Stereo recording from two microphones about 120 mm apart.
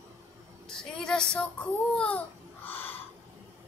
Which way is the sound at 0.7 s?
5° left (ahead or behind).